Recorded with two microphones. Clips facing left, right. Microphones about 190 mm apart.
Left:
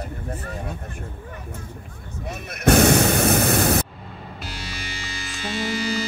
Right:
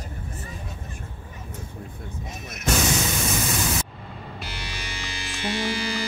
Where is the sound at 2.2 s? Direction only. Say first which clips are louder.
Left 10 dB; 60° left (ahead or behind).